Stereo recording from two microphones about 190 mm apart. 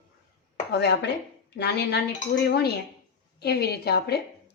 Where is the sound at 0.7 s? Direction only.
65° left (ahead or behind).